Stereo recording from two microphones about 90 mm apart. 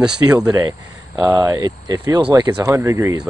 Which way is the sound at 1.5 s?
40° right (ahead or behind).